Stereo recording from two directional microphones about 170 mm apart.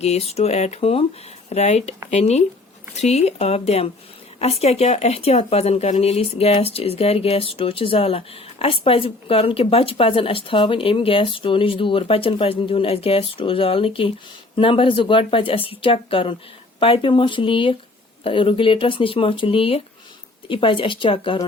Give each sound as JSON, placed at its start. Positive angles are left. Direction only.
{"t": 0.0, "sound": "speech", "side_deg": 40}